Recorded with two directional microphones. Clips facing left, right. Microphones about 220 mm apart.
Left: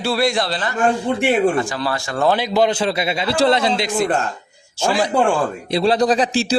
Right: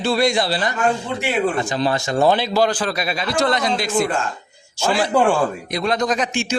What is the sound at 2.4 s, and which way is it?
A man's voice, 20° left (ahead or behind).